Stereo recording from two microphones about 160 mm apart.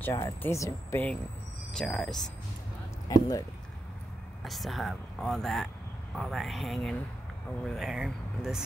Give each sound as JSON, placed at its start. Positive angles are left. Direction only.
{"t": 0.4, "sound": "speech", "side_deg": 20}
{"t": 3.1, "sound": "speech", "side_deg": 25}
{"t": 4.5, "sound": "speech", "side_deg": 0}